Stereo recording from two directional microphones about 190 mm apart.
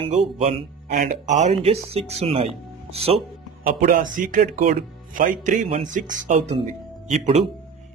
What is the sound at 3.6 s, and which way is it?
Speech, 45° right (ahead or behind).